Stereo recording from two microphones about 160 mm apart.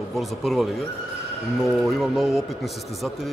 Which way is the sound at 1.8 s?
Centre (ahead or behind).